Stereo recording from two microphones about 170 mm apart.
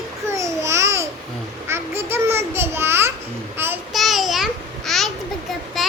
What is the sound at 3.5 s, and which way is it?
Child singing, 15° right (ahead or behind).